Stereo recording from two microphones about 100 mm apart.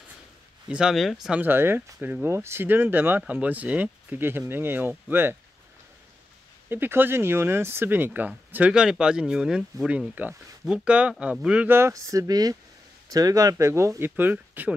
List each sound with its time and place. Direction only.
0.7 s speech: 5° right (ahead or behind)
1.4 s speech: 20° right (ahead or behind)
6.7 s speech: 20° right (ahead or behind)
11.9 s speech: 35° right (ahead or behind); by 14.7 s 20° right (ahead or behind)